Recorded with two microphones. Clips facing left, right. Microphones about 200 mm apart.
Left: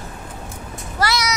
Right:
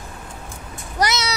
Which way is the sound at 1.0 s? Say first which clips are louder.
Even; 20° right (ahead or behind).